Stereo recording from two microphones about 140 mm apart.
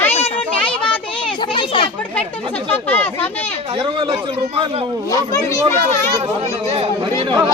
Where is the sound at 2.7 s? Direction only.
15° left (ahead or behind).